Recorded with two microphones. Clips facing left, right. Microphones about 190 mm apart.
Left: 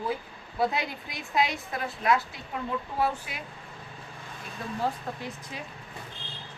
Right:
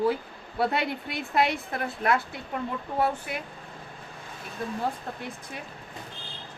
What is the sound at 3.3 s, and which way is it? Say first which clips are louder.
Speech: right 6 dB; 55° right (ahead or behind).